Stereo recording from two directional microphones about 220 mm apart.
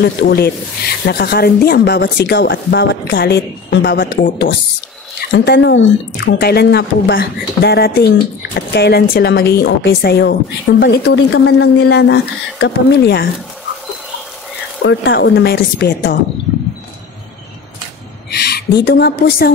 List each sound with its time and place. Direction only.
0.0 s speech: 45° left (ahead or behind)
14.8 s speech: 55° left (ahead or behind)
18.3 s speech: 45° left (ahead or behind)